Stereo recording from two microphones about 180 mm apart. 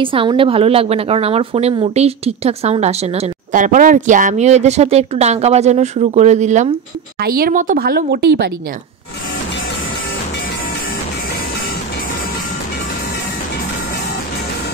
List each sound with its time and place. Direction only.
0.0 s a woman's voice: 30° right (ahead or behind)
7.2 s speech: 55° right (ahead or behind)